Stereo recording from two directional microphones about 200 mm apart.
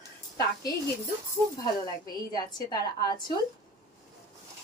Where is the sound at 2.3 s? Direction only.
20° left (ahead or behind).